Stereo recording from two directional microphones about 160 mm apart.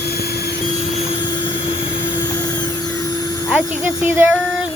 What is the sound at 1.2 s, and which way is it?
Vehicle, 30° left (ahead or behind).